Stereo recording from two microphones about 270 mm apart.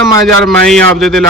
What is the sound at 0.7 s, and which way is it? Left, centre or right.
Speech, centre.